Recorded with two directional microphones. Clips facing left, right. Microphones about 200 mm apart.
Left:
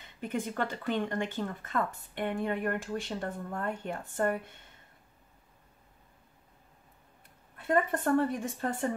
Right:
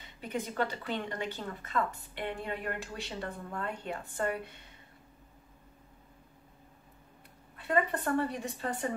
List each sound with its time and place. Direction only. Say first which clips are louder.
0.6 s a woman's voice: left 2 dB; 50° left (ahead or behind)
7.6 s a woman's voice: left 2 dB; 50° left (ahead or behind)